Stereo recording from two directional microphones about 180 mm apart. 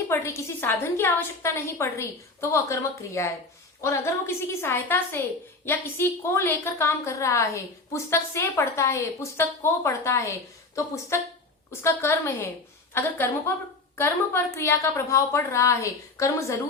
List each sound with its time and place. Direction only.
0.1 s a woman's voice: 15° left (ahead or behind)